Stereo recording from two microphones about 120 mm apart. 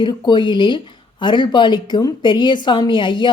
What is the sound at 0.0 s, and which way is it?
Speech, 40° left (ahead or behind).